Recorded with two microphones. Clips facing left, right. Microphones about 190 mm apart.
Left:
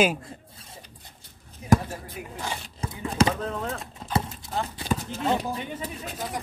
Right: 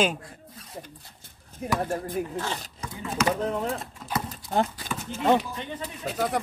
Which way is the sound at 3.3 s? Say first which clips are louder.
Right 3 dB; 20° right (ahead or behind).